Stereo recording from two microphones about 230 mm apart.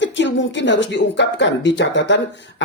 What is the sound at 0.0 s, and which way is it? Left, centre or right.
Speech, left.